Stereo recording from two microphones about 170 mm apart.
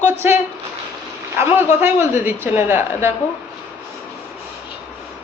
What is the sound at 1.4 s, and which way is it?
Speech, 15° right (ahead or behind).